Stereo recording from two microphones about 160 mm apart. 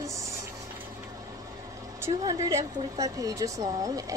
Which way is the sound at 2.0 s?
20° right (ahead or behind).